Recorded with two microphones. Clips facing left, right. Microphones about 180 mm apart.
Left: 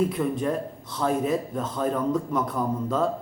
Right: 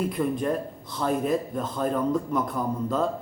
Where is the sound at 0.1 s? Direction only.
5° left (ahead or behind).